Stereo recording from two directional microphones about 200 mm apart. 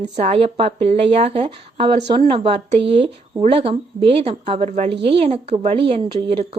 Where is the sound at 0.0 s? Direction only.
30° right (ahead or behind).